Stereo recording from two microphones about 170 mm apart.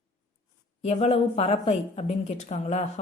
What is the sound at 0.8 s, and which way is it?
A woman's voice, 35° left (ahead or behind).